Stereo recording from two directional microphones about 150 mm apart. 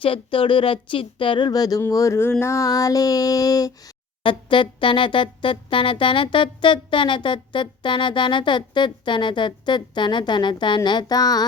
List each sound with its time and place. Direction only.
0.0 s music: 35° left (ahead or behind); by 2.3 s 20° left (ahead or behind)
2.4 s a sound: 20° left (ahead or behind)
4.2 s music: 35° left (ahead or behind)